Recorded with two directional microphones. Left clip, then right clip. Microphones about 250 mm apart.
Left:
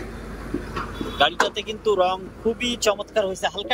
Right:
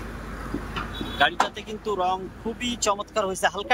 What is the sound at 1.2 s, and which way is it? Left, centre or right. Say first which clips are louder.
A man's voice: left 2 dB; centre.